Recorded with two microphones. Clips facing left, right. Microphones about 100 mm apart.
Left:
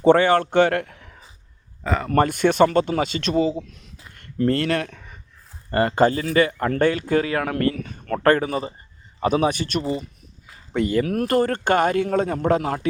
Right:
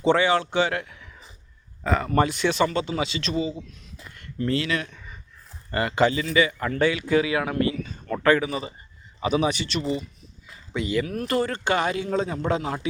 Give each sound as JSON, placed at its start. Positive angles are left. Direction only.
{"t": 0.0, "sound": "a man's voice", "side_deg": 50}
{"t": 1.8, "sound": "a man's voice", "side_deg": 0}
{"t": 2.1, "sound": "speech", "side_deg": 50}
{"t": 5.7, "sound": "speech", "side_deg": 45}